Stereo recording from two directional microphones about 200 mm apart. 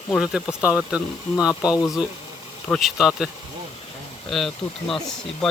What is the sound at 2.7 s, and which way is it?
Speech, centre (ahead or behind).